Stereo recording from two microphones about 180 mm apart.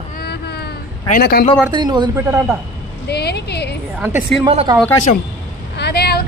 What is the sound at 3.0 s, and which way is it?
Speech, 65° left (ahead or behind).